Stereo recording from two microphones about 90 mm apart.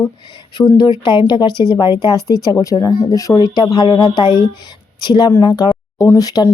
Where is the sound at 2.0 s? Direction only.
45° left (ahead or behind).